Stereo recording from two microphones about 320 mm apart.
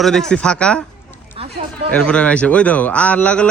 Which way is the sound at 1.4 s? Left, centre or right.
Centre.